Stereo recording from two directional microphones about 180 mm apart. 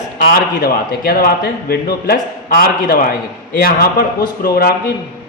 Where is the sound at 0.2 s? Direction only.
55° left (ahead or behind).